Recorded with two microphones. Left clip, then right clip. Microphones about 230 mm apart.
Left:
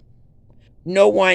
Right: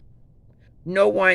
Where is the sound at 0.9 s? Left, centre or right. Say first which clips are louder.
Left 4 dB; centre.